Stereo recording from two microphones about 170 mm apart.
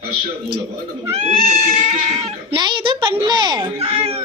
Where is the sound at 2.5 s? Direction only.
25° right (ahead or behind).